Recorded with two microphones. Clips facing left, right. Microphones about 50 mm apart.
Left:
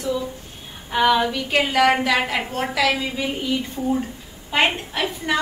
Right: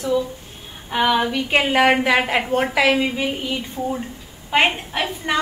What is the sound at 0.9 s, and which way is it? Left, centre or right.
A woman's voice, centre.